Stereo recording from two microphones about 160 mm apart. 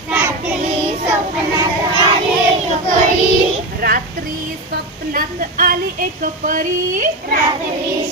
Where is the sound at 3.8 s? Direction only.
65° right (ahead or behind).